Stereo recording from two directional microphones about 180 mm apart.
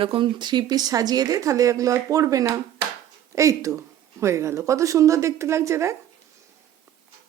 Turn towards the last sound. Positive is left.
turn(degrees=-15)  # may be behind; listen again after turning